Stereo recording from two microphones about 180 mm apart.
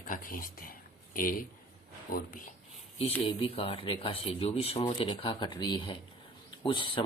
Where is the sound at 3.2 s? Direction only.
30° left (ahead or behind).